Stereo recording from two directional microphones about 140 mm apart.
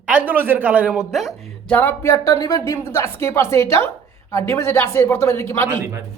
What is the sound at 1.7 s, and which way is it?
Speech, 15° left (ahead or behind).